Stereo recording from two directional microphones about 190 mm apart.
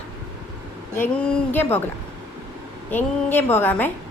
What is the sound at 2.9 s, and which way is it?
A woman's voice, 10° left (ahead or behind).